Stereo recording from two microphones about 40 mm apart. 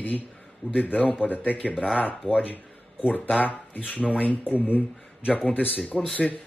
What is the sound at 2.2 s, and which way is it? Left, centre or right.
Speech, right.